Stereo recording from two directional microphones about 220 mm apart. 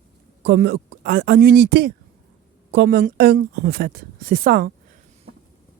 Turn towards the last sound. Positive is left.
turn(degrees=-40)  # may be behind; listen again after turning